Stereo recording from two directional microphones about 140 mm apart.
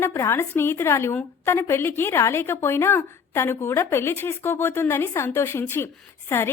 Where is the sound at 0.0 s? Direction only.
20° left (ahead or behind).